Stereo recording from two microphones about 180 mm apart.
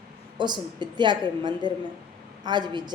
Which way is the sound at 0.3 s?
25° right (ahead or behind).